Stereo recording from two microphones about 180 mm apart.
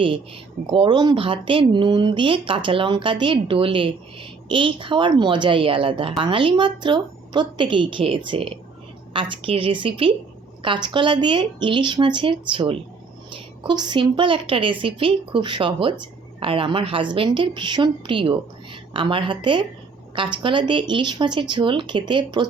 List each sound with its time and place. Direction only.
0.7 s speech: 25° right (ahead or behind)